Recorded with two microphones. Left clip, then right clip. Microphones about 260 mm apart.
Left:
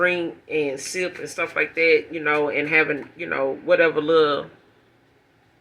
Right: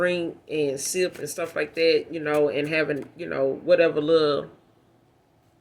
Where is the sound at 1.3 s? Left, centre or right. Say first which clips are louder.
Left 7 dB; right.